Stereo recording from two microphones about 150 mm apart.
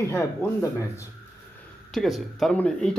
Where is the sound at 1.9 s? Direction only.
Centre (ahead or behind).